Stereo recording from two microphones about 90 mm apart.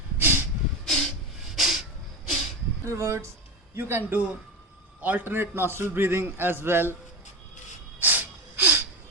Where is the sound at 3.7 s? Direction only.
25° right (ahead or behind).